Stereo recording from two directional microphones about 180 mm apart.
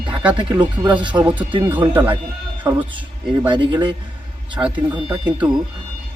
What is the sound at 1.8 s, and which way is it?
Speech, 20° right (ahead or behind).